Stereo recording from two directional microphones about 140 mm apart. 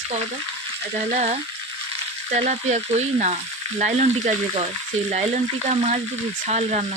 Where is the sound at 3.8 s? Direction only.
55° right (ahead or behind).